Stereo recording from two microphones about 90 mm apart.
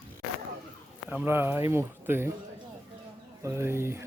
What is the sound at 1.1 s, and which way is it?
Speech, 20° right (ahead or behind).